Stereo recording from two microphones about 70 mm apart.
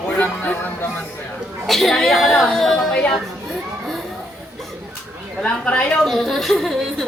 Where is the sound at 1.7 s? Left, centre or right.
Centre.